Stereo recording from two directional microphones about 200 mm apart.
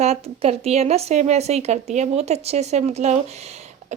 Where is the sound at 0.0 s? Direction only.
30° right (ahead or behind).